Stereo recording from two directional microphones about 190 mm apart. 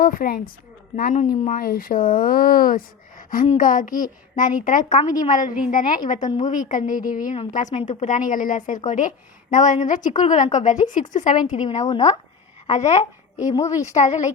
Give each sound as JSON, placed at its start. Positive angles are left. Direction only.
{"t": 0.0, "sound": "speech", "side_deg": 50}
{"t": 12.6, "sound": "a woman's voice", "side_deg": 35}
{"t": 13.4, "sound": "a woman's voice", "side_deg": 20}
{"t": 13.7, "sound": "speech", "side_deg": 40}